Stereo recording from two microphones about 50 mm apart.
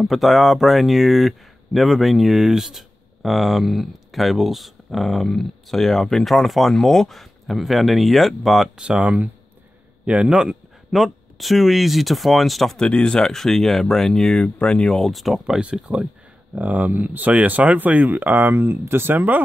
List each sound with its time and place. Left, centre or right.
0.0 s speech: centre
8.7 s speech: centre
10.9 s speech: centre
12.7 s speech: centre
15.0 s speech: centre
15.6 s speech: right
16.5 s speech: right